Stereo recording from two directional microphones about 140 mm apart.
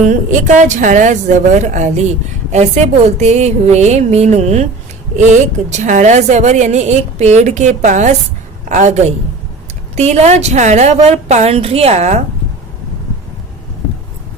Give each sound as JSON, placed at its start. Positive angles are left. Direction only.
{"t": 0.1, "sound": "a woman's voice", "side_deg": -65}